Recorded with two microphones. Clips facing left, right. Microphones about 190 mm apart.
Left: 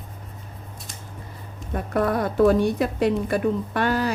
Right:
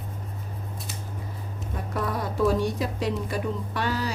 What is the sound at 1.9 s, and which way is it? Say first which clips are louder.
Speech: left 8 dB; 60° left (ahead or behind).